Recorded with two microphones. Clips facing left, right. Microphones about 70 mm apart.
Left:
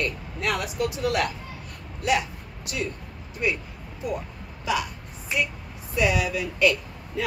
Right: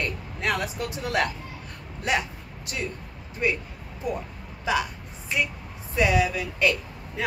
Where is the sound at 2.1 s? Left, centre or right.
Right.